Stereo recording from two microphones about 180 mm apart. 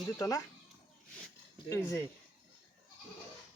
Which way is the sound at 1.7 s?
15° left (ahead or behind).